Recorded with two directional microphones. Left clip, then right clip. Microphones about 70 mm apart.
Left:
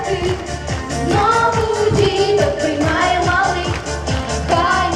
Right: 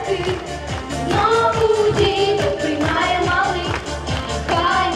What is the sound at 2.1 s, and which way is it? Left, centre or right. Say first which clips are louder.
Music: left 3 dB; left.